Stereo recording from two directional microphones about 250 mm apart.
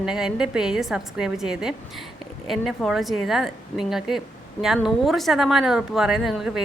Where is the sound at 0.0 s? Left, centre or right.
Centre.